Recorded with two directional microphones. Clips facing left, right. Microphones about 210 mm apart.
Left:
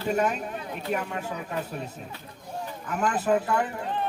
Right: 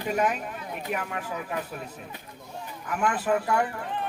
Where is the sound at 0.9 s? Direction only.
30° left (ahead or behind).